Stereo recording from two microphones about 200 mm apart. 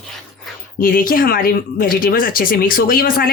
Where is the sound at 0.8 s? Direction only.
45° left (ahead or behind).